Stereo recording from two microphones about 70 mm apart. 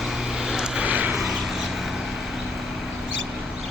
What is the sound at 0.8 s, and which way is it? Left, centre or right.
Vehicle, right.